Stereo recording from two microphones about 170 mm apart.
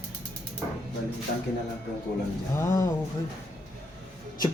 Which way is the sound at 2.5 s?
20° left (ahead or behind).